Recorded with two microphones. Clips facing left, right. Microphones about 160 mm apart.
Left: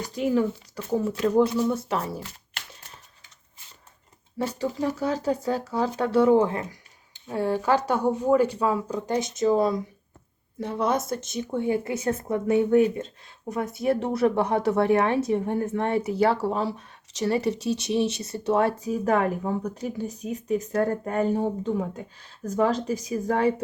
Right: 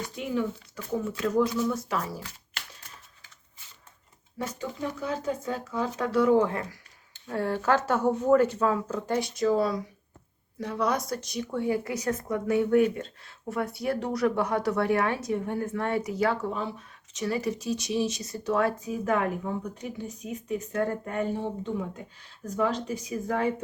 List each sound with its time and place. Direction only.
0.9 s speech: 35° left (ahead or behind)
4.4 s speech: 35° left (ahead or behind)